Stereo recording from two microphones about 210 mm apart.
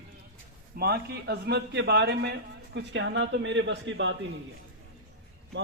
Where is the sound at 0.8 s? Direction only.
50° right (ahead or behind).